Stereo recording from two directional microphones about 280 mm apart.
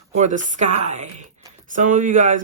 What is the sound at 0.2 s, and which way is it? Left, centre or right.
Speech, right.